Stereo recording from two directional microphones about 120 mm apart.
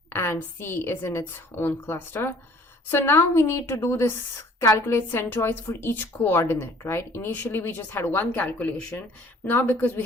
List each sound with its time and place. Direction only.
0.1 s a woman's voice: 20° left (ahead or behind)